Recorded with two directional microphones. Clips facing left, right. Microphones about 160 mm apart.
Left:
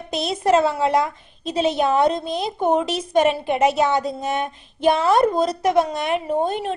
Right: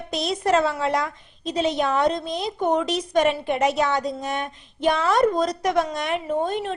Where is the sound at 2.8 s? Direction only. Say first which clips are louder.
Even; 5° left (ahead or behind).